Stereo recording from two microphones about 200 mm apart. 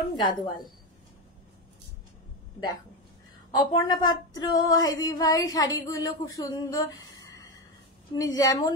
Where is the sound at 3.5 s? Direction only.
20° left (ahead or behind).